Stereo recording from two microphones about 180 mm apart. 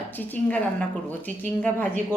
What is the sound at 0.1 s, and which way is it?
A woman's voice, 10° left (ahead or behind).